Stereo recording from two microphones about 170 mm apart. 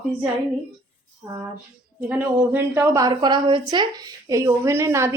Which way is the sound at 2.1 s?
10° right (ahead or behind).